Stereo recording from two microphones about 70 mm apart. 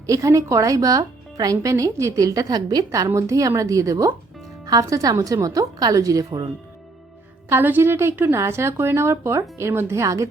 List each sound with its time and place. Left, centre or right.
0.0 s speech: right
3.1 s a woman's voice: right
7.5 s speech: right